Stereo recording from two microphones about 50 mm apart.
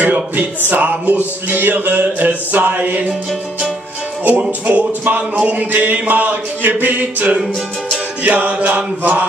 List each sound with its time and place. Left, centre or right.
0.0 s music: right
4.4 s music: right